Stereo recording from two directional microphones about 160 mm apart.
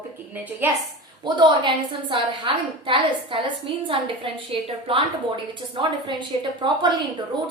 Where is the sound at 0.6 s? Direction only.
15° right (ahead or behind).